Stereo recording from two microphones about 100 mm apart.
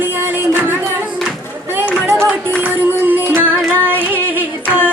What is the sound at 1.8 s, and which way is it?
Run, 20° right (ahead or behind).